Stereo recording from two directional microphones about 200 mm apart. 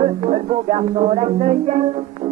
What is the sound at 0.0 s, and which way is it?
Music, 30° right (ahead or behind).